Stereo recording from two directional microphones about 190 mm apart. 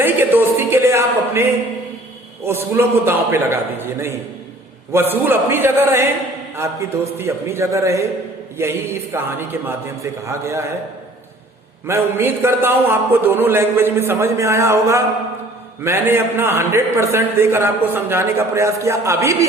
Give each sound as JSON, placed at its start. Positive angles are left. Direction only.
{"t": 0.0, "sound": "a sound", "side_deg": -10}
{"t": 2.5, "sound": "a man's voice", "side_deg": -15}
{"t": 11.9, "sound": "a man's voice", "side_deg": -15}